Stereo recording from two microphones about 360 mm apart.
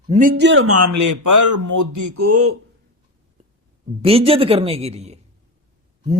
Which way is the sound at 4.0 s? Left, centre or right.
Centre.